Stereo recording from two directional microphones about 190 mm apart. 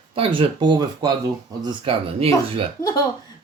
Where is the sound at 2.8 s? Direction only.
20° left (ahead or behind).